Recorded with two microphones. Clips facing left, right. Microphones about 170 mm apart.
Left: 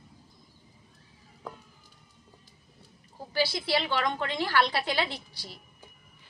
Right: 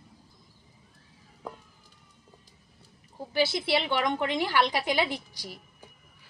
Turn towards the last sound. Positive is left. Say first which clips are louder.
# right 3 dB
turn(degrees=-10)  # may be behind; listen again after turning